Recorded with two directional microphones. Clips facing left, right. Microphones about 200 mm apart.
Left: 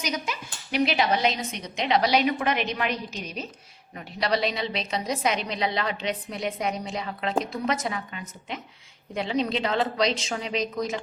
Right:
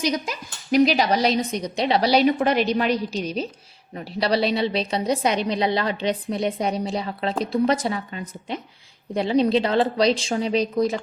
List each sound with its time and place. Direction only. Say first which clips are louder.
0.0 s a woman's voice: right 6 dB; 35° right (ahead or behind)